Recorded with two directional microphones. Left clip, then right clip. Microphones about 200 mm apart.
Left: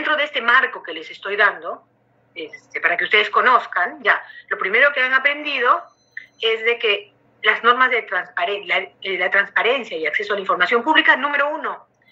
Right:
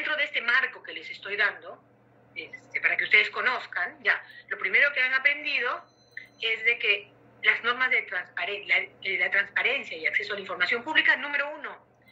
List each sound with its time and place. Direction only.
0.0 s a woman's voice: 45° left (ahead or behind)